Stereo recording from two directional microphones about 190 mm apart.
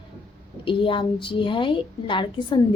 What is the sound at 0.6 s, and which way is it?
A woman's voice, 25° left (ahead or behind).